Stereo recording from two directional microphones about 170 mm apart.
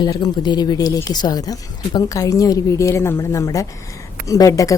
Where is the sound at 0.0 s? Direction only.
25° left (ahead or behind).